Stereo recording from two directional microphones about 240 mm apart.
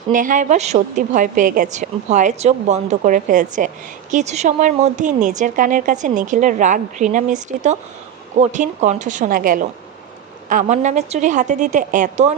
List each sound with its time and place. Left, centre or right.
0.1 s speech: right